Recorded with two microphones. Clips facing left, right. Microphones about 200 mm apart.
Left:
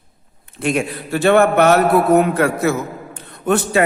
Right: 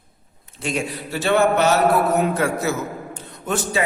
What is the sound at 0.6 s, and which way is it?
A man's voice, 60° left (ahead or behind).